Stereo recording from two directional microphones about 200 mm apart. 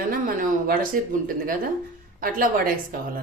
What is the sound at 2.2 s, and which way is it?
Speech, 45° right (ahead or behind).